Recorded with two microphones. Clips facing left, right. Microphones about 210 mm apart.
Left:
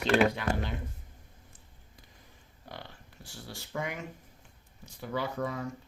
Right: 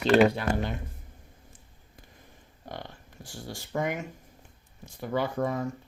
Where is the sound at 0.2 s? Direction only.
40° right (ahead or behind).